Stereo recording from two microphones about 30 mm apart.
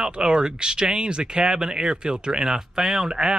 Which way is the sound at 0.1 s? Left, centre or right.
Right.